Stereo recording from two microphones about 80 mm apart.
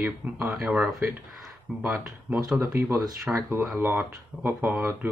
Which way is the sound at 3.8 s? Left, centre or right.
Right.